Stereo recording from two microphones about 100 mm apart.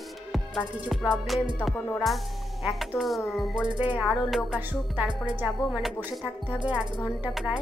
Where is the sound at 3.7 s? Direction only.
15° right (ahead or behind).